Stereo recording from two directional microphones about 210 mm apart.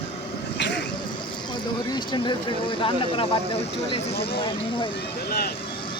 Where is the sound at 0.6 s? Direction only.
55° left (ahead or behind).